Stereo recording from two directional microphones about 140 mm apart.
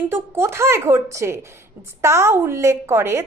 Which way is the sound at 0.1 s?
15° right (ahead or behind).